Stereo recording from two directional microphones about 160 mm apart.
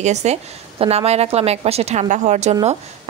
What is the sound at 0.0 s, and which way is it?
A woman's voice, 45° right (ahead or behind).